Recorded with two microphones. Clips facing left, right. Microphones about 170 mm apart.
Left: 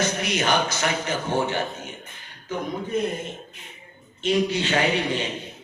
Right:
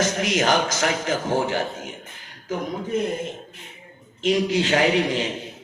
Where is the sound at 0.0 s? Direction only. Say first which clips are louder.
Right 3 dB; 90° right.